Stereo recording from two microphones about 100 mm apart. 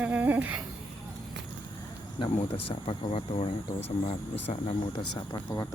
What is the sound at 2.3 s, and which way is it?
Speech, 80° left.